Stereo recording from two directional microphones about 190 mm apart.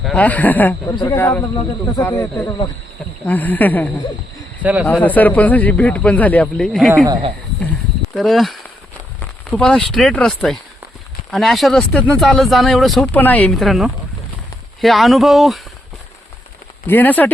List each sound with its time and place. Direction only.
0.0 s speech: 5° left (ahead or behind)
4.6 s speech: 5° right (ahead or behind)
5.0 s speech: 10° left (ahead or behind)
7.0 s speech: 20° right (ahead or behind)
7.7 s wild animals: centre (ahead or behind)
9.5 s speech: 5° left (ahead or behind)
16.8 s speech: 10° left (ahead or behind)